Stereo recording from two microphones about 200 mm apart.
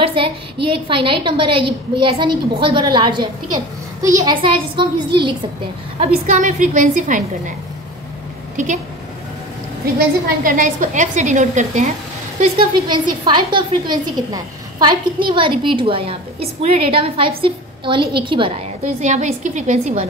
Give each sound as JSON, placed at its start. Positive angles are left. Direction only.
{"t": 0.0, "sound": "a woman's voice", "side_deg": -25}
{"t": 5.9, "sound": "a woman's voice", "side_deg": -40}
{"t": 10.4, "sound": "a woman's voice", "side_deg": -40}
{"t": 12.4, "sound": "a woman's voice", "side_deg": -25}